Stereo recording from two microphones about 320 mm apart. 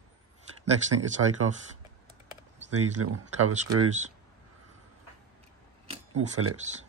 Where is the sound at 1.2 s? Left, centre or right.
Right.